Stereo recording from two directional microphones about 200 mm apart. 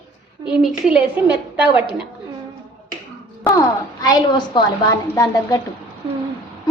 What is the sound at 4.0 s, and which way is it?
A woman's voice, 20° left (ahead or behind).